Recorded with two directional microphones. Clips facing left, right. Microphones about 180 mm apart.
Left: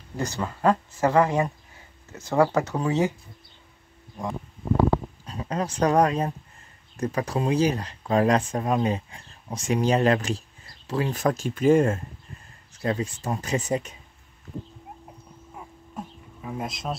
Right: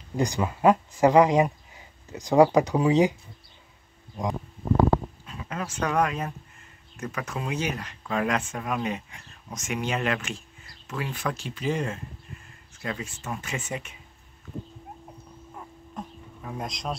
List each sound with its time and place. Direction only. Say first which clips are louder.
0.2 s speech: right 3 dB; 15° right (ahead or behind)
5.2 s speech: left 5 dB; 35° left (ahead or behind)
12.7 s speech: left 7 dB; 35° left (ahead or behind)
15.5 s insect: left 1 dB; 5° left (ahead or behind)